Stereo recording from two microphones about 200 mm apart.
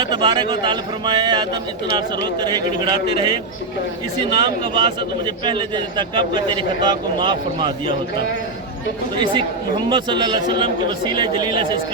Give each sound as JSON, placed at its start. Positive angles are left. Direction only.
{"t": 0.0, "sound": "a man's voice", "side_deg": -20}
{"t": 9.1, "sound": "a man's voice", "side_deg": -25}